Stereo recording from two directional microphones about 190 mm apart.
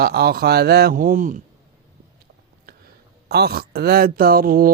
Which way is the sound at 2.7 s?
50° right (ahead or behind).